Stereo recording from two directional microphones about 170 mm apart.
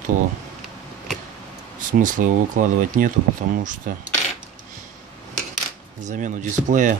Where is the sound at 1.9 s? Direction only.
50° right (ahead or behind).